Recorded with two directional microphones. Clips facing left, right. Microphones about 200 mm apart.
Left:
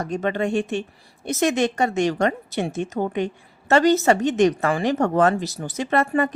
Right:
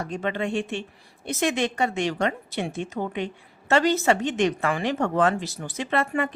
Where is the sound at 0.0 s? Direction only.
45° left (ahead or behind).